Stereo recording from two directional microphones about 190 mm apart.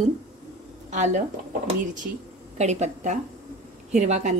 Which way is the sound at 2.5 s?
40° right (ahead or behind).